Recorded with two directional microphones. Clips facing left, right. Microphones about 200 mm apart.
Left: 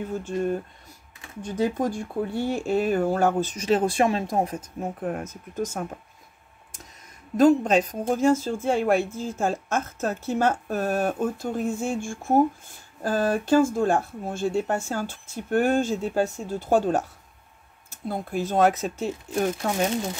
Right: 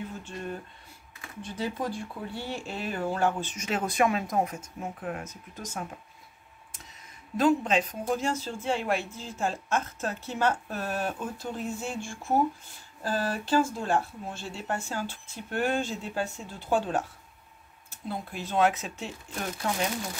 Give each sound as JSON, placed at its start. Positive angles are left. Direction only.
{"t": 0.2, "sound": "speech", "side_deg": 45}
{"t": 7.3, "sound": "speech", "side_deg": 45}